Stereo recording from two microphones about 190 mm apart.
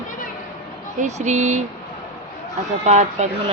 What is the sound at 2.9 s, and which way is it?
Speech, 35° right (ahead or behind).